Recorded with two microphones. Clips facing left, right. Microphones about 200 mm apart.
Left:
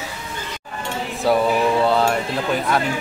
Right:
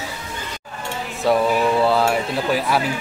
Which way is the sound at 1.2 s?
Centre (ahead or behind).